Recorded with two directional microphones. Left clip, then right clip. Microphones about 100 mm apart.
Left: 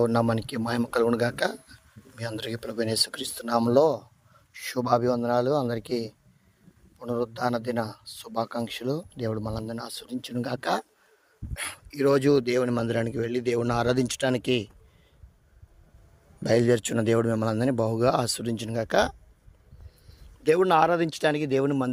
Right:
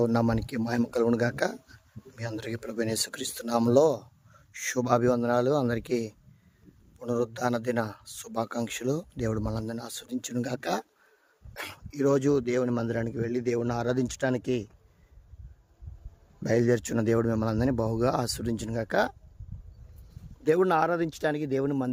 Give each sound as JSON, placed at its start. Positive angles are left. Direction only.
{"t": 0.0, "sound": "speech", "side_deg": -40}
{"t": 3.2, "sound": "speech", "side_deg": -75}
{"t": 9.5, "sound": "speech", "side_deg": -60}
{"t": 11.5, "sound": "speech", "side_deg": -40}
{"t": 11.9, "sound": "speech", "side_deg": -20}
{"t": 16.5, "sound": "speech", "side_deg": -35}
{"t": 20.4, "sound": "speech", "side_deg": -20}